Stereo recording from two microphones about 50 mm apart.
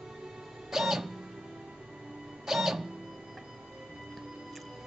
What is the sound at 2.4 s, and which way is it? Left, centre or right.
Music, centre.